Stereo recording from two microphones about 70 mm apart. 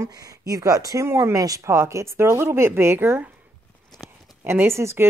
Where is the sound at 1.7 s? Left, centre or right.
Right.